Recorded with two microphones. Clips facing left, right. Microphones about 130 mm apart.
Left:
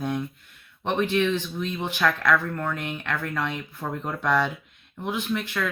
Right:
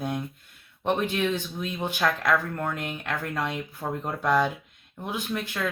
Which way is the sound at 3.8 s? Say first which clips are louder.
Even; 25° right (ahead or behind).